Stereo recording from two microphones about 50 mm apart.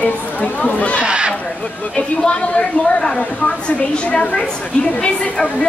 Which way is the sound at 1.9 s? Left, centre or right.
Centre.